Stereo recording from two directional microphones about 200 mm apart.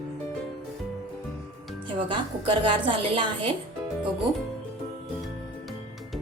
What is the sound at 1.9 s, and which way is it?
A woman's voice, 25° right (ahead or behind).